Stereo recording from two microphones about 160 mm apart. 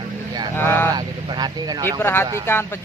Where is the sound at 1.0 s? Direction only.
25° right (ahead or behind).